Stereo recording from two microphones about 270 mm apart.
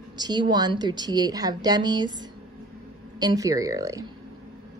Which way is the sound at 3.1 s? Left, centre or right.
Centre.